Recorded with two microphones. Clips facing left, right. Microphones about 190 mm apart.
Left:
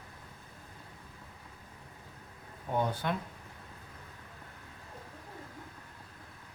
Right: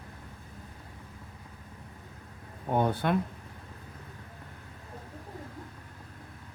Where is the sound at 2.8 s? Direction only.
55° right (ahead or behind).